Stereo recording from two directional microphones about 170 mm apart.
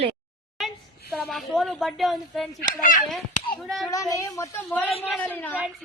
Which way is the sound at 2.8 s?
55° left (ahead or behind).